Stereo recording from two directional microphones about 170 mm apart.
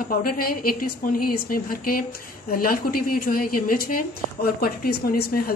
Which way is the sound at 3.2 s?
60° left (ahead or behind).